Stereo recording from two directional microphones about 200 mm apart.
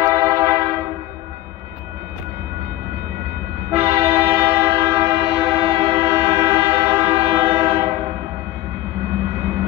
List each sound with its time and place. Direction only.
0.0 s train: 15° right (ahead or behind)
3.7 s train: 15° right (ahead or behind)